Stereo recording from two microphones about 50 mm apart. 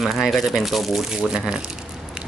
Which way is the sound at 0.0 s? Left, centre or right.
Centre.